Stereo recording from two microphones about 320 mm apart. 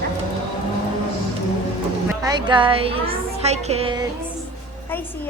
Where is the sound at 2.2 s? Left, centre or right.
Centre.